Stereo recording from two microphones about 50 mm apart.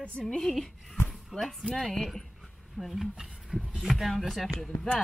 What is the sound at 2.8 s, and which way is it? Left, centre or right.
Speech, centre.